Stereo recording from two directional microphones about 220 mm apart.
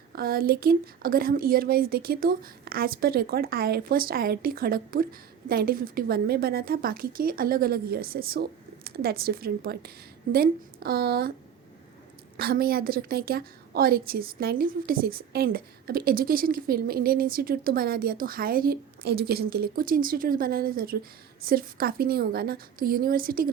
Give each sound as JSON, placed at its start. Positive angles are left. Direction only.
{"t": 0.2, "sound": "a woman's voice", "side_deg": -40}
{"t": 12.4, "sound": "a woman's voice", "side_deg": -45}